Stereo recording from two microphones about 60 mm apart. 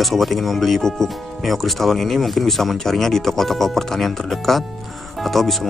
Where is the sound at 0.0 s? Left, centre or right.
Centre.